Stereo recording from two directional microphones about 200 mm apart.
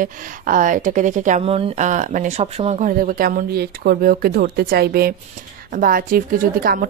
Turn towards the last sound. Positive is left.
turn(degrees=-45)  # may be behind; listen again after turning